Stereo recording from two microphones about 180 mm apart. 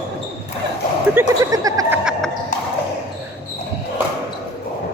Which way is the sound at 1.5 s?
20° right (ahead or behind).